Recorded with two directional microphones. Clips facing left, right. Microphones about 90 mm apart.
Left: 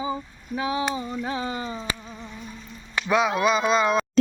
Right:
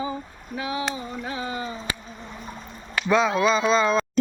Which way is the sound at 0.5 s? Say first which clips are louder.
Left 3 dB; 30° left (ahead or behind).